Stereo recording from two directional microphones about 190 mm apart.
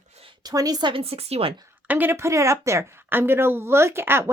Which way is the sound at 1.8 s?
10° right (ahead or behind).